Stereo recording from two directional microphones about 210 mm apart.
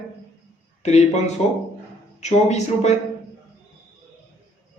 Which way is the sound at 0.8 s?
30° left (ahead or behind).